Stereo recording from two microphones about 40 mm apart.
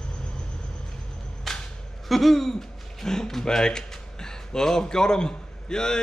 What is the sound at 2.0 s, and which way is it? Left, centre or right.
Speech, centre.